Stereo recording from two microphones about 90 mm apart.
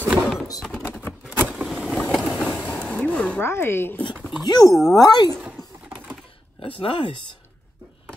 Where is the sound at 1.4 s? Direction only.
20° right (ahead or behind).